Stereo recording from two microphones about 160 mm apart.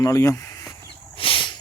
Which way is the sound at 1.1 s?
35° left (ahead or behind).